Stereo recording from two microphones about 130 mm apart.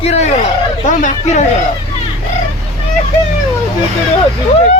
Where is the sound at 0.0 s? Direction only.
55° left (ahead or behind).